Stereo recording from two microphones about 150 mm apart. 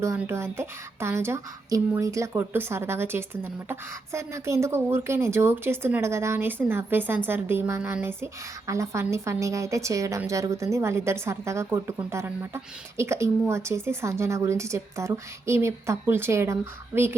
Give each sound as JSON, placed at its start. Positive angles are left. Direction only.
{"t": 0.2, "sound": "a woman's voice", "side_deg": -15}